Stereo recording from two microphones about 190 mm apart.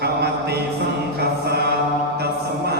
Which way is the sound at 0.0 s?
60° right (ahead or behind).